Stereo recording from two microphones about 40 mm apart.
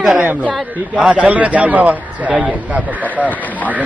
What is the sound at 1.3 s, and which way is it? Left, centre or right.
Speech, right.